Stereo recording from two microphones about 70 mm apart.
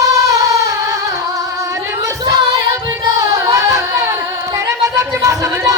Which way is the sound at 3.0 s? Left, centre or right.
Right.